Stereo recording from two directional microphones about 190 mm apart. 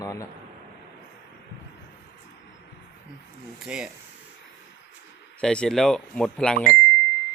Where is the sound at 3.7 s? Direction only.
5° right (ahead or behind).